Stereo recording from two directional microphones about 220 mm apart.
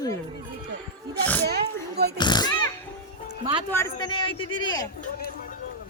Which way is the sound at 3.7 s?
10° left (ahead or behind).